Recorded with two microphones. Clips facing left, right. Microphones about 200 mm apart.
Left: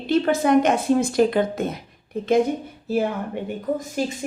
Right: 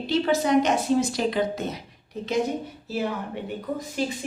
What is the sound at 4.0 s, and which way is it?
Speech, 45° left (ahead or behind).